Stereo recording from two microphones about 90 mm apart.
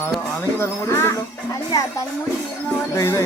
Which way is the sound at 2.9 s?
30° left (ahead or behind).